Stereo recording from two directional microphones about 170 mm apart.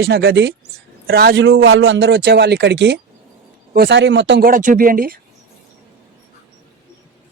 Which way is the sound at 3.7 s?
80° right.